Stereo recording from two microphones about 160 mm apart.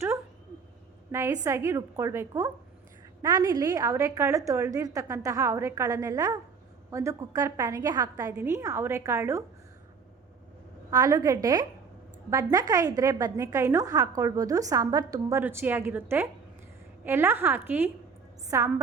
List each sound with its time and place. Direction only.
1.1 s a woman's voice: 15° right (ahead or behind)
10.9 s a woman's voice: 20° right (ahead or behind)